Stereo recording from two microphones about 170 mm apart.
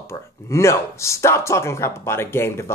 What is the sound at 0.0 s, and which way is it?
Speech, 15° left (ahead or behind).